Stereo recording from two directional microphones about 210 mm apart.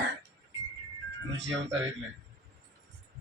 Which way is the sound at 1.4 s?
60° right (ahead or behind).